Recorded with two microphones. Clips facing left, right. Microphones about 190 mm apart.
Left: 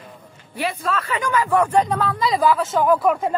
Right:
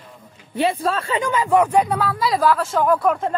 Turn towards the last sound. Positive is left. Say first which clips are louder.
# left 1 dB
turn(degrees=5)  # may be behind; listen again after turning